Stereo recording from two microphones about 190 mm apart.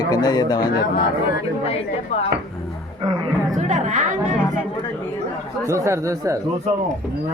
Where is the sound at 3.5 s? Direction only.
40° right (ahead or behind).